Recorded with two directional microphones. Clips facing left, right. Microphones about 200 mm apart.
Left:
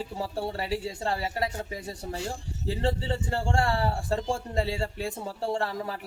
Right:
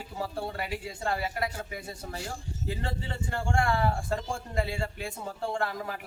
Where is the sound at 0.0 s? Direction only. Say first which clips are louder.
Left 3 dB; 35° left (ahead or behind).